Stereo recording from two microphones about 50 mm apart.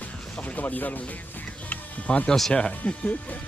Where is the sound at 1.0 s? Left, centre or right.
Left.